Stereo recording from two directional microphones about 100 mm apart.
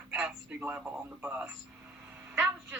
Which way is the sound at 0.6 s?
20° right (ahead or behind).